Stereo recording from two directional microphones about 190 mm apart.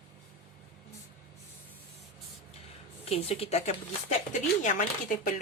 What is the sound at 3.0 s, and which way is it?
Speech, 30° left (ahead or behind).